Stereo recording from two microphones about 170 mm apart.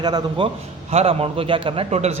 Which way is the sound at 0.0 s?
25° right (ahead or behind).